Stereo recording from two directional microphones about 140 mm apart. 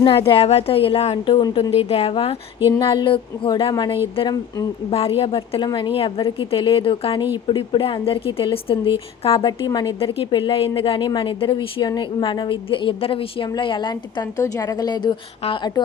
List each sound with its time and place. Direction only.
0.0 s a woman's voice: 40° left (ahead or behind)